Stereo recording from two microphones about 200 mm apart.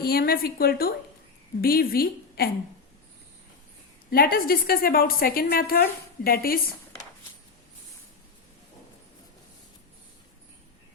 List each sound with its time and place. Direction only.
0.0 s a woman's voice: 50° left (ahead or behind)
4.1 s a woman's voice: 50° left (ahead or behind)